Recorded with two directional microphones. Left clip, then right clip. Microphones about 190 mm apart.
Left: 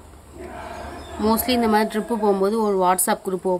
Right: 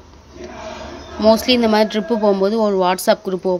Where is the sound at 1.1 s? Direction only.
25° right (ahead or behind).